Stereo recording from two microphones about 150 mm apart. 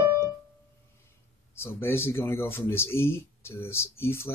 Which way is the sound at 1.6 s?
15° left (ahead or behind).